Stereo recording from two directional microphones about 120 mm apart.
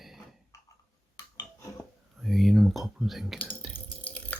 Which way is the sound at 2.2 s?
Centre (ahead or behind).